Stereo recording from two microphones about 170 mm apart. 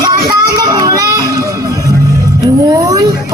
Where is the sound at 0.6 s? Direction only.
20° right (ahead or behind).